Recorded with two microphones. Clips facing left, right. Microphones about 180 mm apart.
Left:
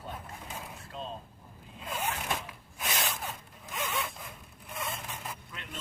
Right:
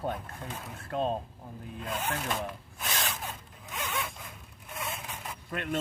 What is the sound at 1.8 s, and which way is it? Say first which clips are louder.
Speech: right 1 dB; 10° left (ahead or behind).